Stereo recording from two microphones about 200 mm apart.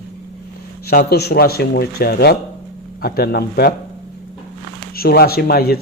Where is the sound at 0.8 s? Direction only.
50° left (ahead or behind).